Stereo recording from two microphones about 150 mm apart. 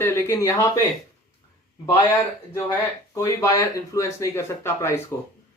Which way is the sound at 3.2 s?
20° left (ahead or behind).